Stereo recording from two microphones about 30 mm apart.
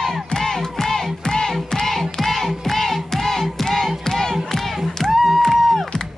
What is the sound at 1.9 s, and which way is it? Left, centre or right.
Music, centre.